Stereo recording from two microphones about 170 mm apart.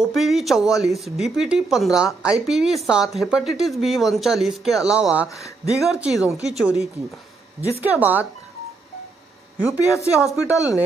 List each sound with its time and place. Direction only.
0.0 s a woman's voice: centre (ahead or behind)
9.7 s a woman's voice: 20° left (ahead or behind)